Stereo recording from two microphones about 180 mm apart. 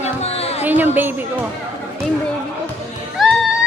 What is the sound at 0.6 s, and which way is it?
Speech, 10° right (ahead or behind).